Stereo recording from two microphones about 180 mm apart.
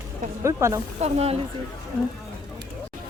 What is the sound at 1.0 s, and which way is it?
Speech, 35° right (ahead or behind).